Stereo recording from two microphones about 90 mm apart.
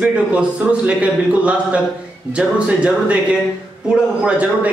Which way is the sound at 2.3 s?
10° right (ahead or behind).